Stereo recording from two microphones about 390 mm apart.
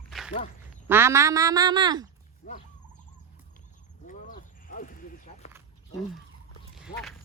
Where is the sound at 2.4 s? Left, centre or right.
Centre.